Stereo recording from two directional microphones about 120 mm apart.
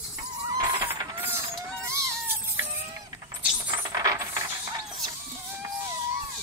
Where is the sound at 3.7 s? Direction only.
30° right (ahead or behind).